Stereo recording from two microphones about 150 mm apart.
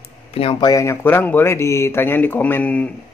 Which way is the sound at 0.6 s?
20° left (ahead or behind).